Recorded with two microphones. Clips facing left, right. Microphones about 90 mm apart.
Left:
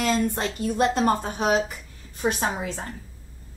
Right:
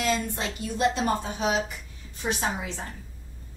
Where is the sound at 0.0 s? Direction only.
50° left (ahead or behind).